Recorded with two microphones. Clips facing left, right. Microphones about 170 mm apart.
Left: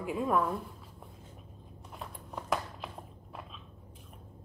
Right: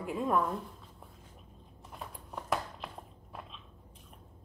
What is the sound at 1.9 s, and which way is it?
Biting, centre (ahead or behind).